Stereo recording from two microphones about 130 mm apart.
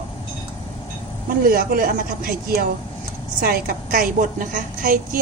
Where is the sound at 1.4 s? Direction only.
90° right.